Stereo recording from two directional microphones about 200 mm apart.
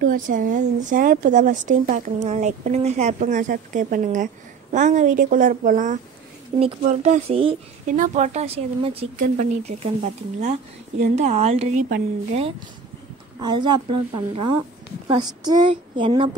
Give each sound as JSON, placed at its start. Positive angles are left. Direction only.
{"t": 0.0, "sound": "a woman's voice", "side_deg": -40}
{"t": 13.4, "sound": "a woman's voice", "side_deg": -20}